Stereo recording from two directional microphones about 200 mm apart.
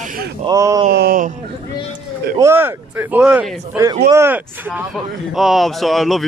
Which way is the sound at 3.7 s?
15° right (ahead or behind).